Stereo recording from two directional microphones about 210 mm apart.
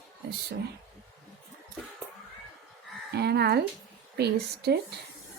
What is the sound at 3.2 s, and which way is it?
Speech, 50° right (ahead or behind).